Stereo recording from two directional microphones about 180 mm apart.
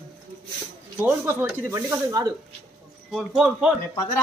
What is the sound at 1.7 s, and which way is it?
Speech, 20° right (ahead or behind).